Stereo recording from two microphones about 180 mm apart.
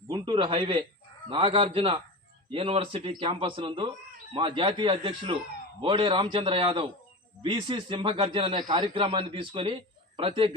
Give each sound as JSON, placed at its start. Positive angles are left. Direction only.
{"t": 0.1, "sound": "a man's voice", "side_deg": -25}